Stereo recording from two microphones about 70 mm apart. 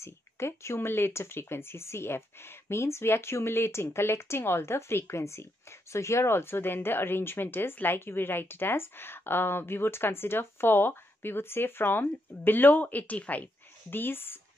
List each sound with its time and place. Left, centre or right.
0.0 s speech: left